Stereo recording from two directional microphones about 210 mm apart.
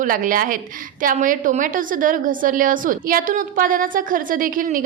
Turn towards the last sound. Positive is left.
turn(degrees=-40)  # may be behind; listen again after turning